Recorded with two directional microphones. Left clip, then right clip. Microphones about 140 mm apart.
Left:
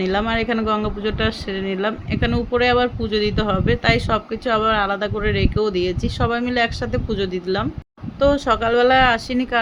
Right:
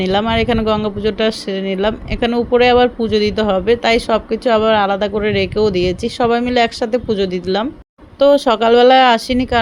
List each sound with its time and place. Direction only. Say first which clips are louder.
0.0 s speech: right 5 dB; 40° right (ahead or behind)